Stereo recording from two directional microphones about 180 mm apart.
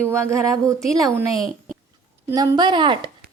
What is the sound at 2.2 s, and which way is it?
Speech, 20° right (ahead or behind).